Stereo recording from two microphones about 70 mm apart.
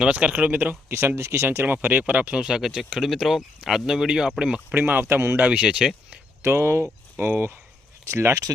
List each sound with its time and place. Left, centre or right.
0.0 s speech: centre
0.9 s speech: right; by 4.6 s centre
4.7 s speech: right
5.4 s speech: centre
6.4 s speech: right